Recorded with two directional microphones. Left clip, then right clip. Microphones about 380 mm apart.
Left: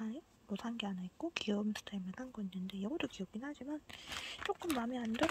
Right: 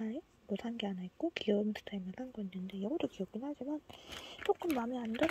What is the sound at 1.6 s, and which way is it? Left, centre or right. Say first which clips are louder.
Speech: right 4 dB; left.